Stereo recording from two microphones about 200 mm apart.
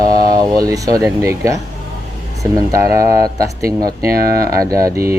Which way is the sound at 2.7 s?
15° right (ahead or behind).